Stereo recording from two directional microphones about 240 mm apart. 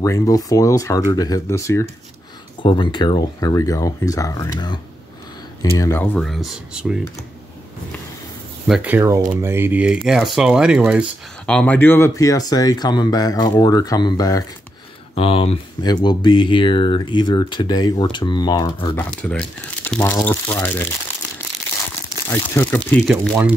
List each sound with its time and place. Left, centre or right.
0.0 s speech: centre
8.6 s speech: centre
18.9 s speech: centre
22.3 s speech: centre